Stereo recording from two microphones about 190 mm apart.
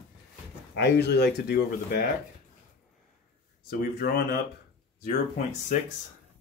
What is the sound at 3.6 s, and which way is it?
Speech, 55° left (ahead or behind).